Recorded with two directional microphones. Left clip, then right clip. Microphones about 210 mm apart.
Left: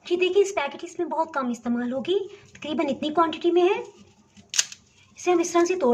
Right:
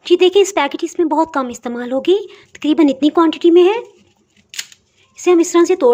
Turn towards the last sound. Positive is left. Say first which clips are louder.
# right 10 dB
turn(degrees=-45)  # may be behind; listen again after turning